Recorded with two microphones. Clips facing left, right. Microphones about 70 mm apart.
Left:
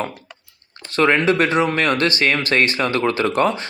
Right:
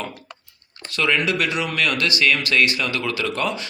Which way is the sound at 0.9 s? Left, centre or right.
Left.